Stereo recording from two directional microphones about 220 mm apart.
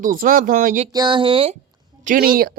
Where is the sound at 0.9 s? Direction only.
20° right (ahead or behind).